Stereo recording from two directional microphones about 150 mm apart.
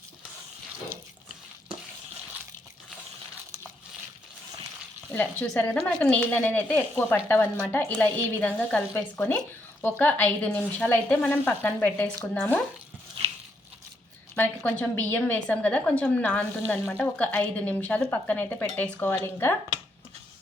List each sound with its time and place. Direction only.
5.1 s a woman's voice: 10° left (ahead or behind)
13.2 s a sound: 40° right (ahead or behind)
14.3 s a woman's voice: 10° left (ahead or behind)